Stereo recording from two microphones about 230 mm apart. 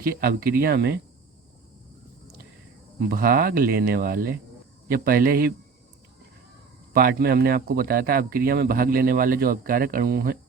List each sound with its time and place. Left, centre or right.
0.0 s speech: right
3.1 s speech: right
6.9 s speech: right